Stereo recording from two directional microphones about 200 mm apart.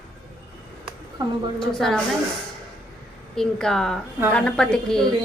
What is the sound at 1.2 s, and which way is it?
Speech, 20° right (ahead or behind).